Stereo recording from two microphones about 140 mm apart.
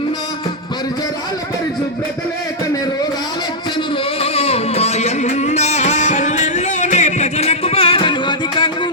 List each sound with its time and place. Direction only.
4.2 s music: 45° left (ahead or behind)